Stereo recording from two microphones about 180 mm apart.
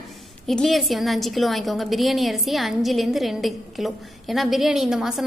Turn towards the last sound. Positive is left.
turn(degrees=0)  # may be behind; listen again after turning